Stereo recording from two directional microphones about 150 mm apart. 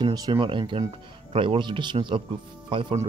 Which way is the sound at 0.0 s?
30° right (ahead or behind).